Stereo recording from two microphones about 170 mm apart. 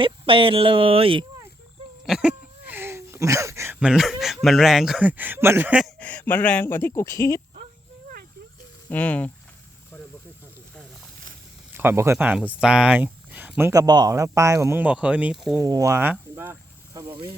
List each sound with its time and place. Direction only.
0.0 s speech: 30° right (ahead or behind)
2.0 s a sound: 5° right (ahead or behind)
3.8 s speech: centre (ahead or behind)
6.0 s speech: 10° left (ahead or behind)
8.9 s speech: 10° left (ahead or behind)
11.7 s speech: 15° right (ahead or behind)
15.5 s speech: 20° right (ahead or behind)
17.1 s speech: 30° right (ahead or behind)